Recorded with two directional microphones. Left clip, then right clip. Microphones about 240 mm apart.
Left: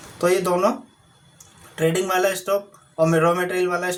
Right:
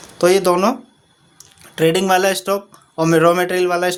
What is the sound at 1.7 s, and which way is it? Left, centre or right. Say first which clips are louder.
Speech: right 6 dB; right.